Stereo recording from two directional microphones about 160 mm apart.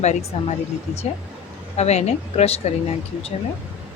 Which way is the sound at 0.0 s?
45° left (ahead or behind).